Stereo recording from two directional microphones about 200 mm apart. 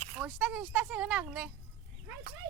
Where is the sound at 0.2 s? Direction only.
5° right (ahead or behind).